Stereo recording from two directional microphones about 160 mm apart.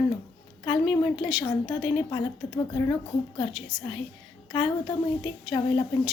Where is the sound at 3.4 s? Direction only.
30° left (ahead or behind).